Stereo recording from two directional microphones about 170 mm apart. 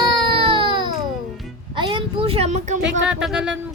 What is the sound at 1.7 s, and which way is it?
Speech, 30° right (ahead or behind).